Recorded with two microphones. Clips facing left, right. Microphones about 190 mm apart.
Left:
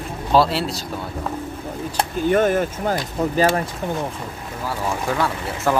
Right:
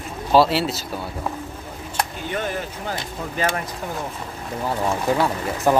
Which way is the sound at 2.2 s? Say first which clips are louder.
Left 9 dB; 50° left (ahead or behind).